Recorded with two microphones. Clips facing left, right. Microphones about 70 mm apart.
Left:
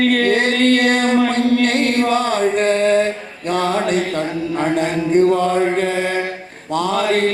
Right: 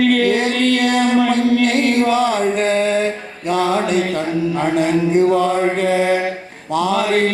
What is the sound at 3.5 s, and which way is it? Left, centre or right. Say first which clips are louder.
Mantra: right 1 dB; left.